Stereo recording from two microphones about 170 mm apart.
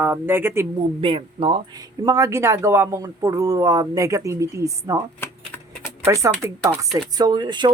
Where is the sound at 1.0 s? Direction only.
30° right (ahead or behind).